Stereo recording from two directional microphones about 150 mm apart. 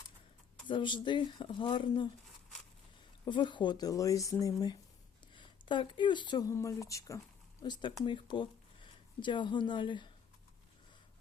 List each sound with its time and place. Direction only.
0.7 s speech: 35° left (ahead or behind)
3.2 s speech: 30° left (ahead or behind)
6.5 s speech: 20° left (ahead or behind)